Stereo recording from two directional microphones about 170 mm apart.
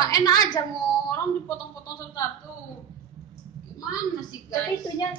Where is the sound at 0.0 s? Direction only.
20° left (ahead or behind).